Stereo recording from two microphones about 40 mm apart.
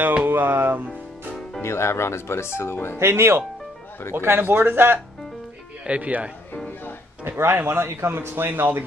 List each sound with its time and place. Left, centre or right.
0.3 s speech: right
1.6 s speech: left
3.0 s speech: right
4.1 s a man's voice: right
4.4 s speech: right
5.9 s speech: right
7.2 s a man's voice: right